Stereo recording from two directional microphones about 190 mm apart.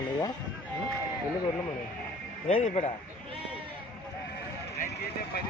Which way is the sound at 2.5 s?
35° left (ahead or behind).